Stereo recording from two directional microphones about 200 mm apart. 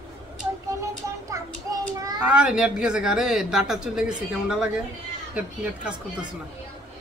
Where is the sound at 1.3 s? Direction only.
15° right (ahead or behind).